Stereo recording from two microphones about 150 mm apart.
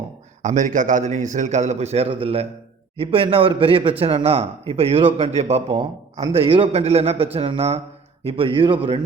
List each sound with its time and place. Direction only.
0.4 s a man's voice: 55° right (ahead or behind); by 9.0 s 35° right (ahead or behind)